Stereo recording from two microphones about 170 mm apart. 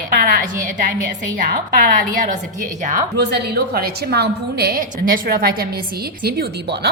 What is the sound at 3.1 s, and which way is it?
A woman's voice, 75° right (ahead or behind).